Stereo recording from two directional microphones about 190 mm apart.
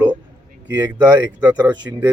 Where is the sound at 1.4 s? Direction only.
10° right (ahead or behind).